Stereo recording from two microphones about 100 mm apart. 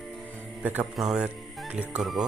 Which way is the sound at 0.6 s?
15° right (ahead or behind).